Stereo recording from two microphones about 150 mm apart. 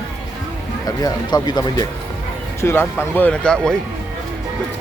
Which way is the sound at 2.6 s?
15° left (ahead or behind).